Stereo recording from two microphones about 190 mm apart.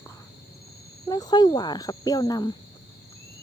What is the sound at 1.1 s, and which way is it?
Speech, 20° left (ahead or behind).